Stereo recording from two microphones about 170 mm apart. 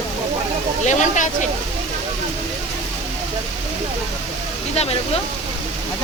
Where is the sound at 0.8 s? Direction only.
45° left (ahead or behind).